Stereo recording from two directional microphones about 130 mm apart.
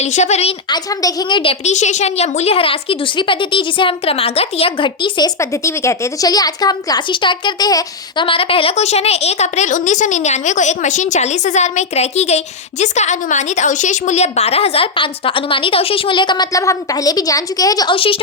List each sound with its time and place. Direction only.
0.0 s a woman's voice: 60° left (ahead or behind)
0.7 s a woman's voice: 30° left (ahead or behind)
1.6 s a woman's voice: 65° left (ahead or behind); by 5.3 s 35° left (ahead or behind)
5.4 s a woman's voice: 20° left (ahead or behind)
17.9 s a woman's voice: 45° left (ahead or behind)